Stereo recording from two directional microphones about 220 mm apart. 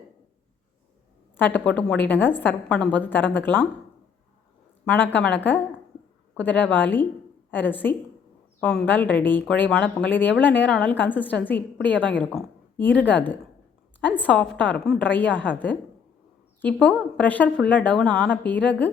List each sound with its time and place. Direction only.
1.4 s a woman's voice: 10° left (ahead or behind)
4.9 s a woman's voice: 5° left (ahead or behind)
17.2 s a woman's voice: 5° left (ahead or behind)